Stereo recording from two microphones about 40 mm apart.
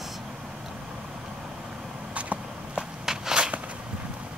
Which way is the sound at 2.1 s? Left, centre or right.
Right.